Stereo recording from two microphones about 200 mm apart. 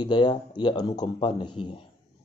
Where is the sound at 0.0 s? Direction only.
20° left (ahead or behind).